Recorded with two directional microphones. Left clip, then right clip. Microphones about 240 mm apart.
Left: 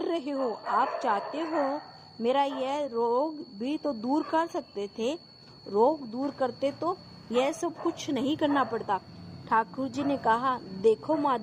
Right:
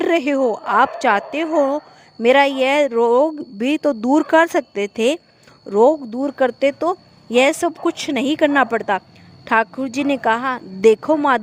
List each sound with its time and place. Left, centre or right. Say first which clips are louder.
0.0 s a woman's voice: right 13 dB; right